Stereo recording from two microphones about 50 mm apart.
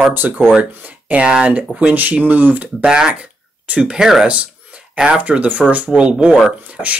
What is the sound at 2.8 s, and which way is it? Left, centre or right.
Speech, centre.